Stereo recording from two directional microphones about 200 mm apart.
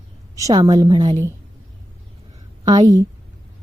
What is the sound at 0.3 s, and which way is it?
Speech, 20° right (ahead or behind).